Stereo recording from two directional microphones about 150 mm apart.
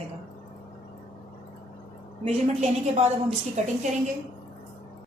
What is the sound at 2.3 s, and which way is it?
A woman's voice, 45° right (ahead or behind).